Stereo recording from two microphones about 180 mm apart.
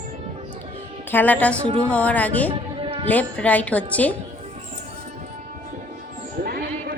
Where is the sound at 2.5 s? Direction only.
30° right (ahead or behind).